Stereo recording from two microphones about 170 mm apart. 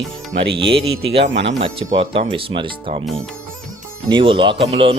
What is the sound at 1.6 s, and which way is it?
Speech, 30° right (ahead or behind).